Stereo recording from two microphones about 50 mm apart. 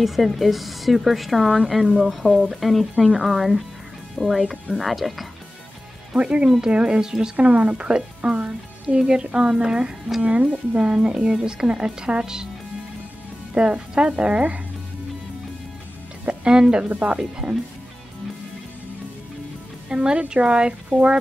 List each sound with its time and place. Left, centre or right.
0.0 s a woman's voice: centre
6.1 s speech: centre
7.3 s speech: right
10.2 s speech: right
13.6 s speech: centre
16.3 s speech: centre
16.9 s speech: right
17.2 s speech: centre
19.9 s speech: centre